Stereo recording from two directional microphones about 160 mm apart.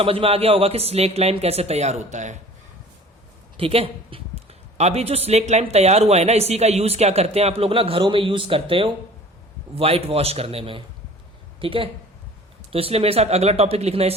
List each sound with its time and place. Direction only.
0.0 s speech: 35° right (ahead or behind)
3.6 s speech: 35° right (ahead or behind)